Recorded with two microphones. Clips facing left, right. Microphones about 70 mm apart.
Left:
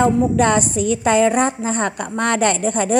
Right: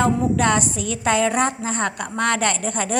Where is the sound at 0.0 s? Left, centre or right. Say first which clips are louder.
Left 3 dB; left.